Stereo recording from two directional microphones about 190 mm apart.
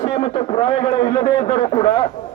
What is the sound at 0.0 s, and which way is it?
A man's voice, 30° left (ahead or behind).